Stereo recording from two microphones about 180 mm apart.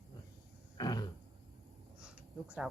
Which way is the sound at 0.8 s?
25° left (ahead or behind).